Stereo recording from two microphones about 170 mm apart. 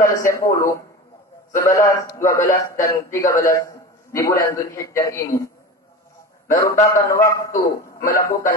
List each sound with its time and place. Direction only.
0.0 s a man's voice: 15° left (ahead or behind)